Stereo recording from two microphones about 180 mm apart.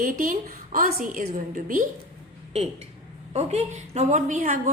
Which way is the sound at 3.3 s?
40° right (ahead or behind).